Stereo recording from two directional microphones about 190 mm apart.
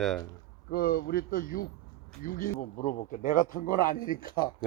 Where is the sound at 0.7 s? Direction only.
55° left (ahead or behind).